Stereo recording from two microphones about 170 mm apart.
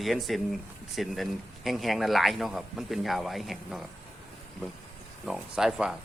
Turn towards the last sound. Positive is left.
turn(degrees=-5)  # may be behind; listen again after turning